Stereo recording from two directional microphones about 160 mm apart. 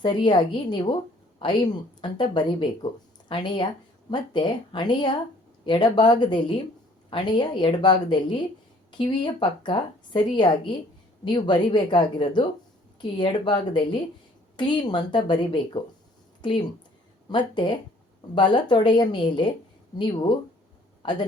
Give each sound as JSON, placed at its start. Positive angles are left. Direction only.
{"t": 0.0, "sound": "a woman's voice", "side_deg": 30}